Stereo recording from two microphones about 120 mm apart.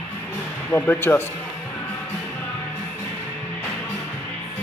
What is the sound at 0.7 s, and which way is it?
Speech, 15° left (ahead or behind).